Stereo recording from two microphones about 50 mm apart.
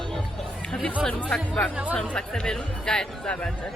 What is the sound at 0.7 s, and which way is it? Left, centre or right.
Speech, left.